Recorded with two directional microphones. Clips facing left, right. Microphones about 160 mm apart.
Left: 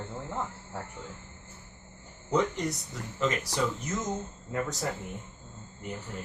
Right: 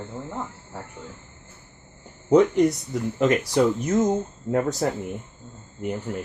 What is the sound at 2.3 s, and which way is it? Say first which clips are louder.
Speech: right 11 dB; 60° right (ahead or behind).